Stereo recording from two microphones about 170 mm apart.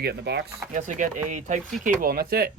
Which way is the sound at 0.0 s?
80° right.